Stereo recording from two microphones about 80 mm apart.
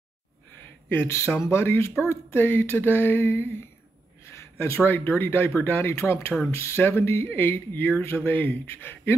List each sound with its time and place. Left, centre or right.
0.8 s speech: left